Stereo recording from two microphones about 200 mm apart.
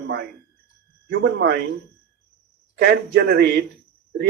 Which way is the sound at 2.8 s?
55° right (ahead or behind).